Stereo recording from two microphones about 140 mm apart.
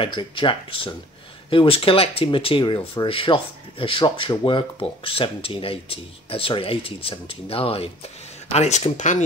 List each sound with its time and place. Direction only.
0.0 s speech: 35° left (ahead or behind); by 9.2 s 60° left (ahead or behind)